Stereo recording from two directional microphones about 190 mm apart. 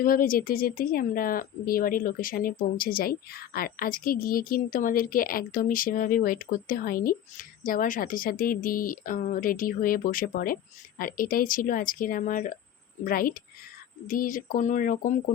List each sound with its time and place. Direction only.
0.0 s speech: 50° left (ahead or behind)